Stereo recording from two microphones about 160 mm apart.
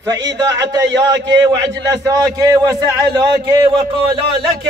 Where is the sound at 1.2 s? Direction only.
90° right.